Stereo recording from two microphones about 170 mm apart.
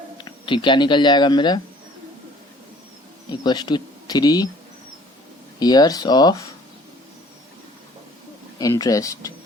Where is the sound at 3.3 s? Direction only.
25° left (ahead or behind).